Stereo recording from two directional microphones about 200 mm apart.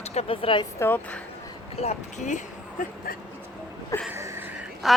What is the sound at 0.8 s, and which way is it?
Speech, 10° left (ahead or behind).